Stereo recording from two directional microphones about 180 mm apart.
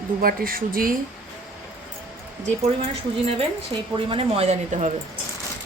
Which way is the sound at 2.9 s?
35° right (ahead or behind).